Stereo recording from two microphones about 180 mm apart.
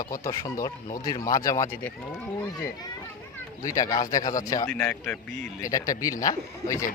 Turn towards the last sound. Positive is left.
turn(degrees=15)  # may be behind; listen again after turning